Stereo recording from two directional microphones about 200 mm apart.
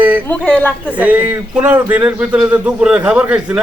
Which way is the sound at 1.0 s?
10° right (ahead or behind).